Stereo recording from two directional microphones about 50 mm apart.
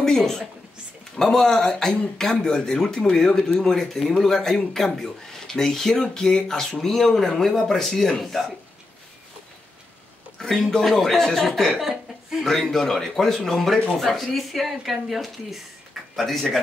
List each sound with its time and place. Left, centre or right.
0.0 s a woman's voice: centre
10.4 s speech: centre
11.8 s chuckle: centre
12.7 s speech: centre